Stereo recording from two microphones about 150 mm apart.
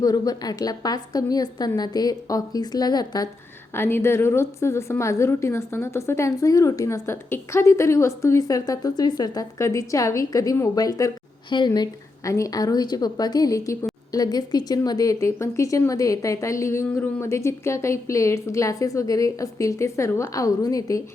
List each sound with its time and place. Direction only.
0.0 s a woman's voice: 25° left (ahead or behind)
3.8 s a woman's voice: 15° left (ahead or behind)